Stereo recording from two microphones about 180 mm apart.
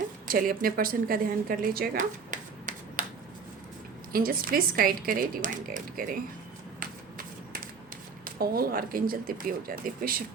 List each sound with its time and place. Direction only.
0.3 s speech: 50° right (ahead or behind)
4.1 s speech: 55° right (ahead or behind)
6.7 s shuffling cards: 50° right (ahead or behind)
8.2 s speech: 55° right (ahead or behind)